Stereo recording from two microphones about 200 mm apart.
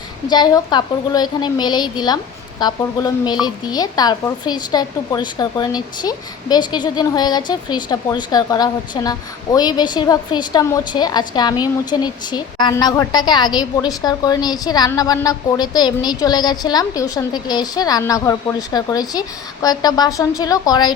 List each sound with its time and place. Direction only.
0.3 s a woman's voice: 20° left (ahead or behind)